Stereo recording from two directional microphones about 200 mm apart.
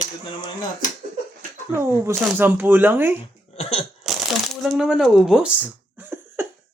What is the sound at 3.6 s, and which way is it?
Cough, 30° left (ahead or behind).